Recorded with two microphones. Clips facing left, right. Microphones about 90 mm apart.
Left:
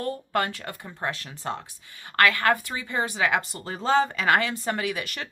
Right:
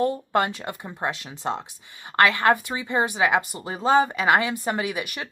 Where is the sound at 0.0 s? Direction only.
20° right (ahead or behind).